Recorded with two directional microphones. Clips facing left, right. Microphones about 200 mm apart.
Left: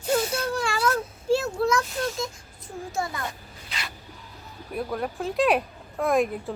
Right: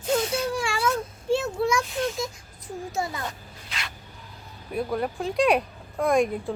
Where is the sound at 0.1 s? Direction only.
5° left (ahead or behind).